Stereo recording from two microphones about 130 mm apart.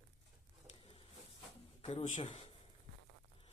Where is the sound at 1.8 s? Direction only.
55° left (ahead or behind).